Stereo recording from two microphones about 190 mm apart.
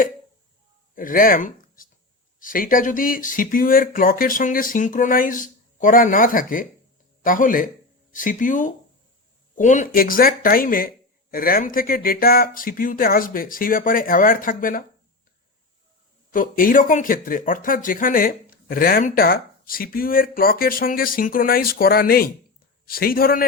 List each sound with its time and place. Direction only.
0.9 s speech: 45° left (ahead or behind)
16.3 s speech: 45° left (ahead or behind)